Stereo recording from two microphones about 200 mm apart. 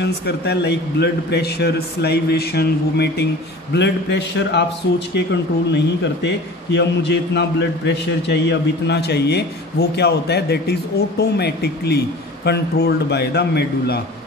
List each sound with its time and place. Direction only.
0.0 s a man's voice: 55° left (ahead or behind)